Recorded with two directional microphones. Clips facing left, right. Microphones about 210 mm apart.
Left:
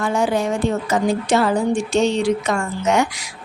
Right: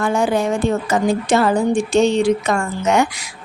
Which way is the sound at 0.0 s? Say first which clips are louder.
Right 2 dB; 50° right (ahead or behind).